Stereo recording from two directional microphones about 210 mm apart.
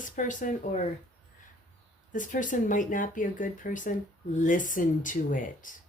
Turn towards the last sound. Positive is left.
turn(degrees=40)  # may be behind; listen again after turning